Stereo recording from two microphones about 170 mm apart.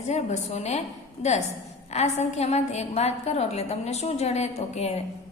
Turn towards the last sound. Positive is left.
turn(degrees=40)  # may be behind; listen again after turning